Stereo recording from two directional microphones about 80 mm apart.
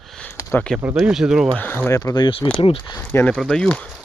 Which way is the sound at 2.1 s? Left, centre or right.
Left.